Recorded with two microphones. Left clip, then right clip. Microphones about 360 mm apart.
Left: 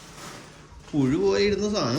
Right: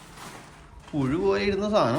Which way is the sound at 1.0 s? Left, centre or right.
Centre.